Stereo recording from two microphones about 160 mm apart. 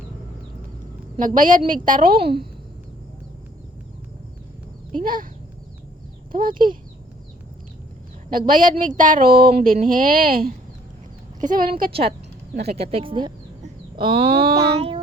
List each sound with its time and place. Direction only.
1.2 s a woman's voice: 55° right (ahead or behind)
4.9 s a woman's voice: 60° right (ahead or behind)
6.3 s a woman's voice: 60° right (ahead or behind)
8.3 s a woman's voice: 60° right (ahead or behind)
9.7 s a woman's voice: 60° right (ahead or behind)
12.7 s speech: 35° right (ahead or behind)